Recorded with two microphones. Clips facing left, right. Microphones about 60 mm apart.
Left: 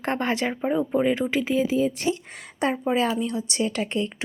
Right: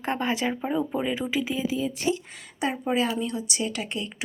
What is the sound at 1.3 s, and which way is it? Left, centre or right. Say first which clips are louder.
Speech: left 4 dB; left.